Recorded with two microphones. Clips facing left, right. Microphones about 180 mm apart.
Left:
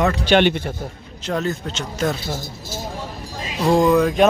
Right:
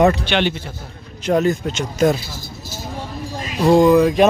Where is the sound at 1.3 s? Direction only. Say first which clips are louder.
Right 6 dB; 15° right (ahead or behind).